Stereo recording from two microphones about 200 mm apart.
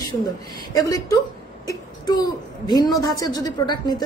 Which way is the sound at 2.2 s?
20° left (ahead or behind).